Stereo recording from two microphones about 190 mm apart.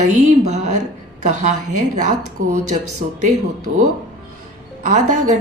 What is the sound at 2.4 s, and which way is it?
Speech, 45° right (ahead or behind).